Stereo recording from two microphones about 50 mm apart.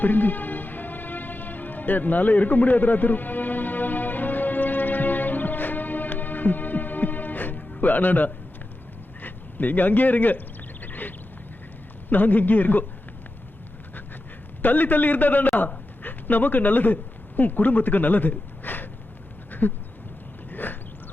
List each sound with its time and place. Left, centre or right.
0.0 s music: left
9.2 s speech: left
10.8 s a sound: left
12.1 s speech: left
14.6 s a man's voice: left
19.5 s a sound: left